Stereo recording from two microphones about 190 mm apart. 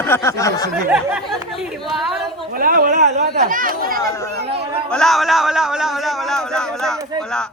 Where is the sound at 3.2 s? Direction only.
50° right (ahead or behind).